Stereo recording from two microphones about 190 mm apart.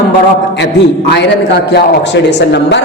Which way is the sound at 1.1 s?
65° left (ahead or behind).